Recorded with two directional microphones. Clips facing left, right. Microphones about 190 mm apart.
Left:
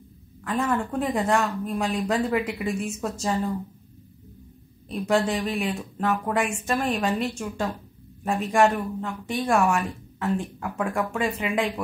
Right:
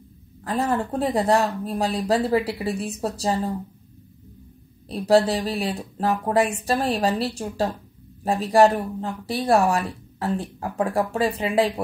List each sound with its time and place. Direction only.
0.4 s speech: 35° right (ahead or behind)
4.8 s speech: 35° right (ahead or behind)